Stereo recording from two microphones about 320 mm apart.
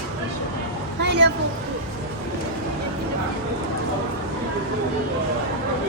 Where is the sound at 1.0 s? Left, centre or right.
Right.